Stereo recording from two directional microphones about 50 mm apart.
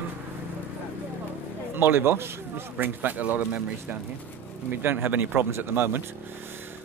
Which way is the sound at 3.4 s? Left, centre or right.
Right.